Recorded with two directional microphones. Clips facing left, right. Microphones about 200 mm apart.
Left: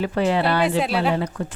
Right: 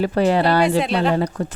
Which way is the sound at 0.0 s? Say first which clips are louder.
Right 3 dB; 40° right (ahead or behind).